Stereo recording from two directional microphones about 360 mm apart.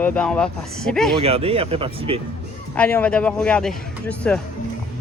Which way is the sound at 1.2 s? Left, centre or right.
Centre.